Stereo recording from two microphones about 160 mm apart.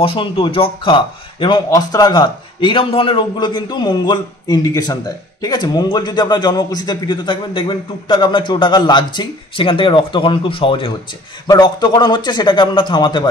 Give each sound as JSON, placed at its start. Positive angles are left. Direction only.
{"t": 0.0, "sound": "speech", "side_deg": 30}